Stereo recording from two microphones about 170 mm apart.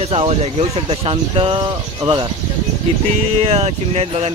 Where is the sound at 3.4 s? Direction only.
35° right (ahead or behind).